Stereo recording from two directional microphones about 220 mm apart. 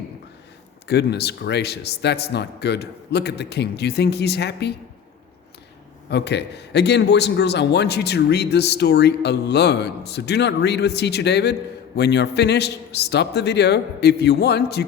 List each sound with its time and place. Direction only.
0.9 s a man's voice: 50° left (ahead or behind)
6.1 s a man's voice: 50° left (ahead or behind)